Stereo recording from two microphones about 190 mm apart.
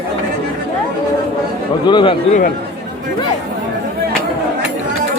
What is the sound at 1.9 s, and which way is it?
Speech, 25° left (ahead or behind).